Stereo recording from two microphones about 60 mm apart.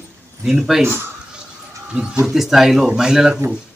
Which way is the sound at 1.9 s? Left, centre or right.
Centre.